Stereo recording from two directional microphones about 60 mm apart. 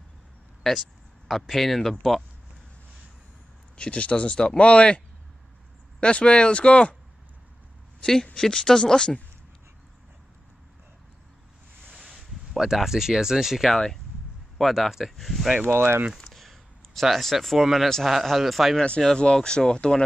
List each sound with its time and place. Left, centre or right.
0.7 s speech: centre
3.7 s speech: centre
8.0 s speech: centre
12.0 s speech: centre
15.7 s speech: right
16.3 s a sound: centre
17.6 s speech: centre
17.8 s speech: centre
18.8 s speech: centre